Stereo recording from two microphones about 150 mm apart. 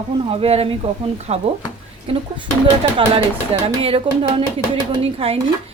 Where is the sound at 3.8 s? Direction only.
40° right (ahead or behind).